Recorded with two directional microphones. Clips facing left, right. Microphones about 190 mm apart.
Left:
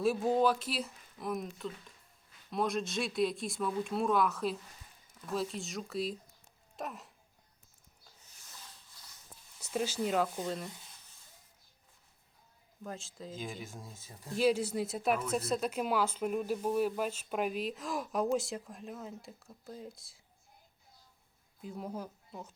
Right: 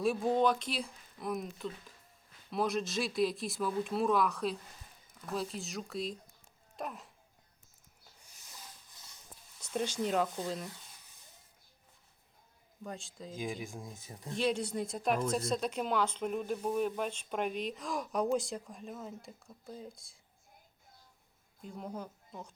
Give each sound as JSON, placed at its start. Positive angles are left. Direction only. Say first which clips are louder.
{"t": 0.0, "sound": "speech", "louder": "left 1 dB", "side_deg": 0}
{"t": 8.5, "sound": "a sound", "louder": "right 2 dB", "side_deg": -20}
{"t": 9.6, "sound": "speech", "louder": "left 1 dB", "side_deg": 5}
{"t": 12.8, "sound": "speech", "louder": "even", "side_deg": 0}
{"t": 13.7, "sound": "speech", "louder": "right 3 dB", "side_deg": -15}
{"t": 14.3, "sound": "speech", "louder": "left 3 dB", "side_deg": 5}
{"t": 21.6, "sound": "speech", "louder": "left 2 dB", "side_deg": 5}